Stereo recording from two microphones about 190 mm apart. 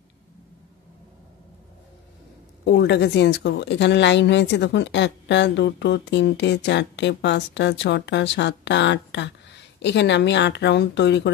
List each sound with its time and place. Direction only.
2.6 s a woman's voice: 60° left (ahead or behind)